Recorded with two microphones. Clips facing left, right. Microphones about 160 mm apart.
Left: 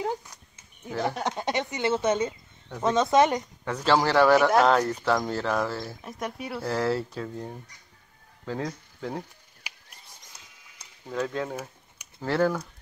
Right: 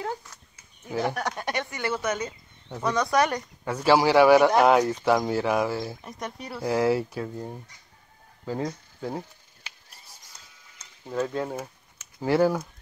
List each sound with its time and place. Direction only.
0.0 s dog: 15° left (ahead or behind)
1.1 s speech: 20° left (ahead or behind)
3.6 s speech: 10° right (ahead or behind)
6.0 s speech: centre (ahead or behind)
6.6 s speech: 10° right (ahead or behind)
9.6 s a sound: 10° left (ahead or behind)
11.1 s speech: 10° right (ahead or behind)